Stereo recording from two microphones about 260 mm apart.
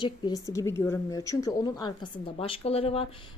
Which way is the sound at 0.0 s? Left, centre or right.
Centre.